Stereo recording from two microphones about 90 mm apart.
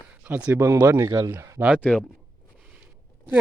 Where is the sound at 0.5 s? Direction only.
30° right (ahead or behind).